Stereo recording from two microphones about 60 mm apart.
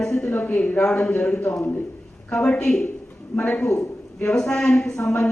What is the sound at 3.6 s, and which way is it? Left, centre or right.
Speech, left.